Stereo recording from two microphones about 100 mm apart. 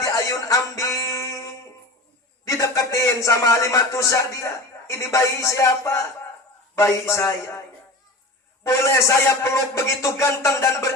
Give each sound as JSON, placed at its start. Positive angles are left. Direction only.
{"t": 0.0, "sound": "music", "side_deg": 35}
{"t": 2.4, "sound": "a man's voice", "side_deg": 35}
{"t": 8.6, "sound": "a man's voice", "side_deg": 30}